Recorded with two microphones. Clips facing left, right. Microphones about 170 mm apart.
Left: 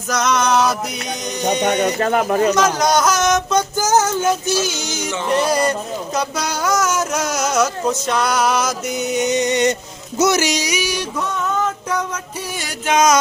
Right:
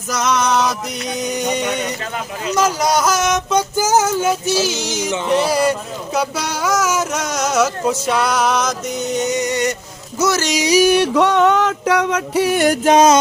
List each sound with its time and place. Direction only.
0.1 s music: centre (ahead or behind)
1.6 s speech: 40° left (ahead or behind)
2.6 s speech: 5° right (ahead or behind); by 9.3 s 10° left (ahead or behind)
9.3 s music: 20° left (ahead or behind)
10.8 s a sound: 55° right (ahead or behind)
12.8 s music: 35° right (ahead or behind)